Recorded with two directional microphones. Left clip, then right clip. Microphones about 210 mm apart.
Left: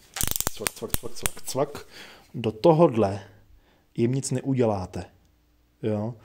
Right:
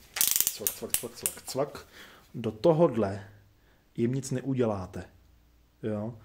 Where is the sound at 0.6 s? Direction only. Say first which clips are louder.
Left 4 dB; 45° left (ahead or behind).